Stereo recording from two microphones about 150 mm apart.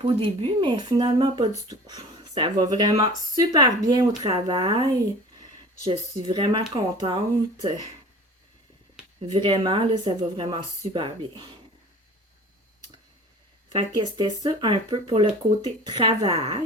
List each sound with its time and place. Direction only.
0.0 s speech: 40° right (ahead or behind)
5.9 s speech: 30° right (ahead or behind)
9.3 s speech: 35° right (ahead or behind)
13.7 s speech: 30° right (ahead or behind)